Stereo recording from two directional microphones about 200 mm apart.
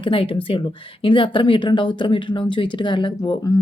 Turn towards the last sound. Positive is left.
turn(degrees=25)  # may be behind; listen again after turning